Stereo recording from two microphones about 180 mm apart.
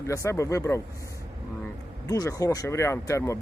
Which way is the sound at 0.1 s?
15° left (ahead or behind).